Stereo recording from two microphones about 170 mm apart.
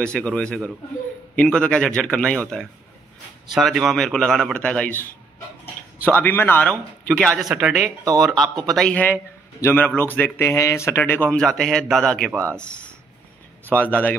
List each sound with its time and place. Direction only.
0.0 s speech: 5° left (ahead or behind)
6.0 s a man's voice: 10° left (ahead or behind)
12.3 s speech: 15° right (ahead or behind)
12.5 s a man's voice: 5° left (ahead or behind)